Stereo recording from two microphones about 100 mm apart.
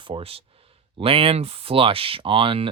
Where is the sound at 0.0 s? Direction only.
65° right (ahead or behind).